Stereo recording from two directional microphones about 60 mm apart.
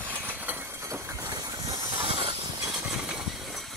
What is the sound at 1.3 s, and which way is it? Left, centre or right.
Engine, right.